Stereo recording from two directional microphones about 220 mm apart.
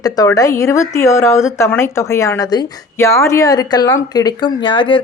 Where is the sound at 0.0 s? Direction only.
15° left (ahead or behind).